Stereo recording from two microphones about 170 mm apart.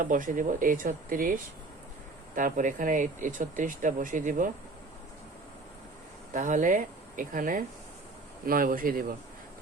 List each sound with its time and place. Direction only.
0.0 s speech: 50° right (ahead or behind)
6.3 s speech: 50° right (ahead or behind)